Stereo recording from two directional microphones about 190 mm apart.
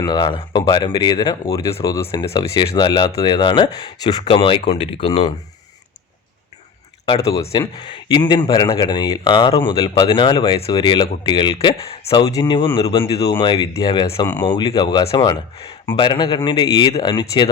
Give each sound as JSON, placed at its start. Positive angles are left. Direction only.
{"t": 0.0, "sound": "speech", "side_deg": 25}
{"t": 7.2, "sound": "speech", "side_deg": 15}